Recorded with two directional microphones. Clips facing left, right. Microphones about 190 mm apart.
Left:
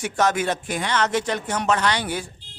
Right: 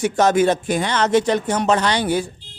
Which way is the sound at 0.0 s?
35° right (ahead or behind).